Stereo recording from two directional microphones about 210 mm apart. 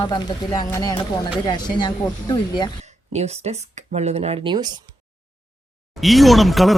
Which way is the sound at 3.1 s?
30° right (ahead or behind).